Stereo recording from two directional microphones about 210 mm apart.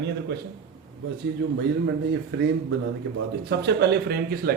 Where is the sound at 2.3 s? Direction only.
55° right (ahead or behind).